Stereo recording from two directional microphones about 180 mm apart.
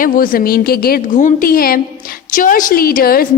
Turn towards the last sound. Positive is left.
turn(degrees=55)  # may be behind; listen again after turning